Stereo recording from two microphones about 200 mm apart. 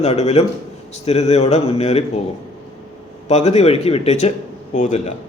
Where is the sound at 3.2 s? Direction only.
35° left (ahead or behind).